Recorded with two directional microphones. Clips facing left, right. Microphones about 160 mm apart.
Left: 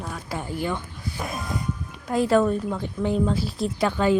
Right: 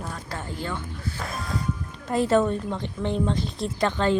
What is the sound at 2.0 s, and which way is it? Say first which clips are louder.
A woman's voice: left 1 dB; centre (ahead or behind).